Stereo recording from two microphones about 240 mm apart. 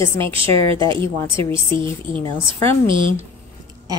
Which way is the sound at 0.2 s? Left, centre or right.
Right.